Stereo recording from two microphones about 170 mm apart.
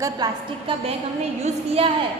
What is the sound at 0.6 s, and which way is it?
A woman's voice, 35° right (ahead or behind).